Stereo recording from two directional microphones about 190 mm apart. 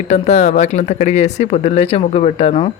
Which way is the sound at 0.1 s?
35° left (ahead or behind).